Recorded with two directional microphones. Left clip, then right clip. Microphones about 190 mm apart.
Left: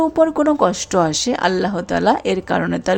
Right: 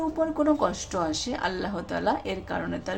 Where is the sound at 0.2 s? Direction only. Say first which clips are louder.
Left 8 dB; 35° left (ahead or behind).